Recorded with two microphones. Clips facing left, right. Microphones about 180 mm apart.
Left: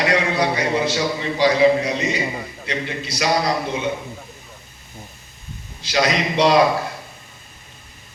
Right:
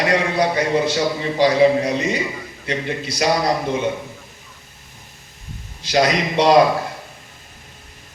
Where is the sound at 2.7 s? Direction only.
50° right (ahead or behind).